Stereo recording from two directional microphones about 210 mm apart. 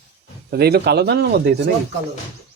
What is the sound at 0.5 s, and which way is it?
Speech, 50° right (ahead or behind).